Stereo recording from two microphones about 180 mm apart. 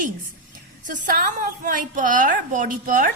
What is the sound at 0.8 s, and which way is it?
A woman's voice, 45° right (ahead or behind).